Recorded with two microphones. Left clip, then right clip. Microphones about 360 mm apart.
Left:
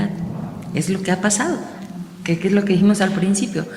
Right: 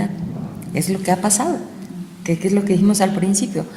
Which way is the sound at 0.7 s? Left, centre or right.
Centre.